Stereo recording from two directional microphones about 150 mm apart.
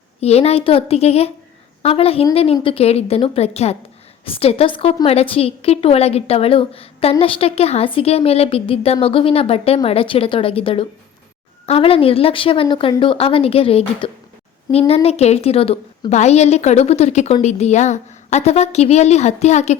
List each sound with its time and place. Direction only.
0.2 s a woman's voice: 45° left (ahead or behind)